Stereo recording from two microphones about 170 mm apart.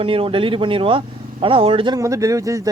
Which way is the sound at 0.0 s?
30° right (ahead or behind).